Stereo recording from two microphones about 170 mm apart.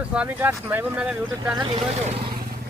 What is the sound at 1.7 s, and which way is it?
Speech, 35° right (ahead or behind).